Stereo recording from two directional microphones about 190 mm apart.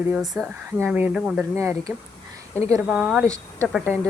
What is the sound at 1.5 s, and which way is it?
A woman's voice, 15° right (ahead or behind).